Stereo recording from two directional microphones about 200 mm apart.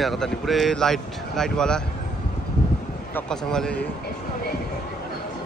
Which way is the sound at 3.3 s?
5° left (ahead or behind).